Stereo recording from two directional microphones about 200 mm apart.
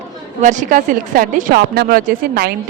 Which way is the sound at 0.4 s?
40° right (ahead or behind).